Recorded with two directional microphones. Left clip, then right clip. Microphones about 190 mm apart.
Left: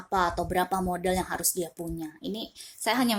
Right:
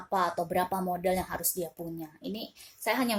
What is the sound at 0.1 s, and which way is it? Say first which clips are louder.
A woman's voice: left 2 dB; 30° left (ahead or behind).